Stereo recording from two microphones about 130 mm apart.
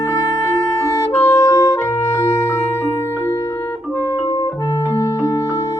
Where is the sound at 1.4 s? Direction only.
25° left (ahead or behind).